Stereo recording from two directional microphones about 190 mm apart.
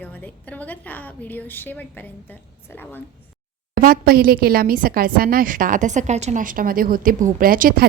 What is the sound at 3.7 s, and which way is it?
A woman's voice, 50° right (ahead or behind).